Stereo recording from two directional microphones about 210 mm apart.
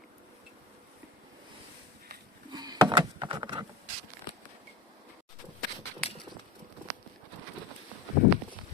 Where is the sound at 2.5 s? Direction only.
20° right (ahead or behind).